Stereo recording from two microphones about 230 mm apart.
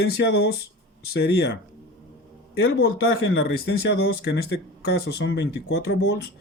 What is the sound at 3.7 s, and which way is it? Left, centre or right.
Speech, left.